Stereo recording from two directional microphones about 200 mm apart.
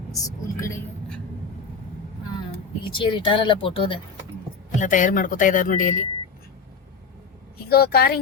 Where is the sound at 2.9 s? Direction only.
25° left (ahead or behind).